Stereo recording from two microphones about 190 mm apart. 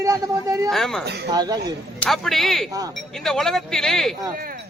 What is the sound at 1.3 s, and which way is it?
Speech, 20° right (ahead or behind).